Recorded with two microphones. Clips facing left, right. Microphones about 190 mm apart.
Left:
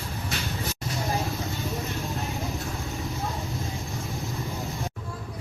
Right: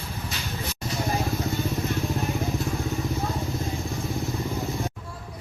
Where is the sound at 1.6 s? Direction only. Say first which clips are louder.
Right 4 dB; centre (ahead or behind).